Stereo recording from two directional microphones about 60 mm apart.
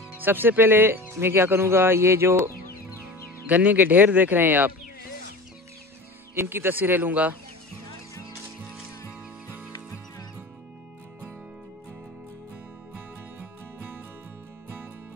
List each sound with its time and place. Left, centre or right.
0.1 s speech: right
3.4 s speech: right
6.3 s speech: right